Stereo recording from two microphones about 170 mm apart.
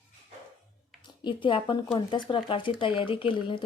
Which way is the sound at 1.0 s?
30° left (ahead or behind).